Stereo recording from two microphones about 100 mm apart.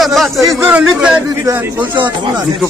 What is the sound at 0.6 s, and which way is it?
Speech, 15° right (ahead or behind).